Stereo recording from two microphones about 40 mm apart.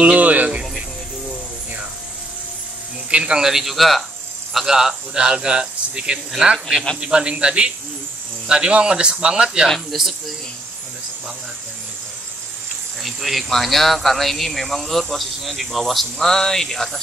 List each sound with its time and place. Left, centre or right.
0.0 s music: right
3.1 s a sound: right
3.3 s speech: centre
4.6 s speech: centre
9.9 s speech: centre
13.0 s speech: centre